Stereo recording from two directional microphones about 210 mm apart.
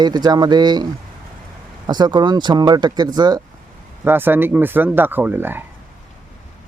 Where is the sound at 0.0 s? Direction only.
20° right (ahead or behind).